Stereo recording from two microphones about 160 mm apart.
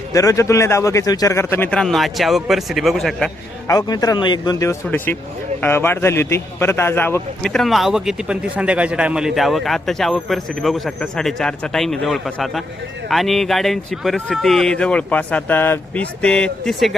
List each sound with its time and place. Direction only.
0.1 s a man's voice: 20° left (ahead or behind); by 3.2 s centre (ahead or behind)
3.7 s a man's voice: 25° left (ahead or behind); by 16.9 s 5° left (ahead or behind)